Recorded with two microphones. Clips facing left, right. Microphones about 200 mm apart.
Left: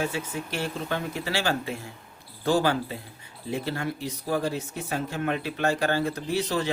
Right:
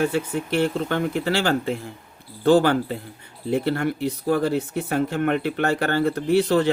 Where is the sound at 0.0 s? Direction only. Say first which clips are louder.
Right 7 dB; 60° right (ahead or behind).